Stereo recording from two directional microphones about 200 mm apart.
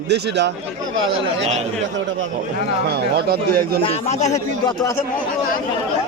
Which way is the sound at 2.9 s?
50° right (ahead or behind).